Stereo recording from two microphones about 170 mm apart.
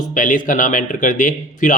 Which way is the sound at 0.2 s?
50° left (ahead or behind).